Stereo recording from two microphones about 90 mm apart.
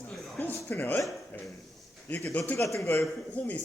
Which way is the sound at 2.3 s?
20° left (ahead or behind).